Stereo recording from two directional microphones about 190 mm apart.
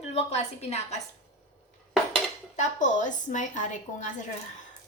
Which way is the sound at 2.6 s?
40° left (ahead or behind).